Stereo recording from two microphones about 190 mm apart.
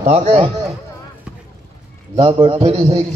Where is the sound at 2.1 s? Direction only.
30° right (ahead or behind).